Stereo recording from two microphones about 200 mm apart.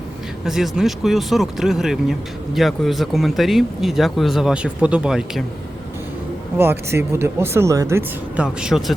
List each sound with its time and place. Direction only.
0.4 s speech: centre (ahead or behind)
6.6 s speech: 10° right (ahead or behind)